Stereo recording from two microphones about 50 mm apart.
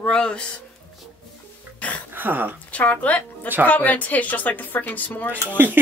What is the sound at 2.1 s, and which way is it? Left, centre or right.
Speech, right.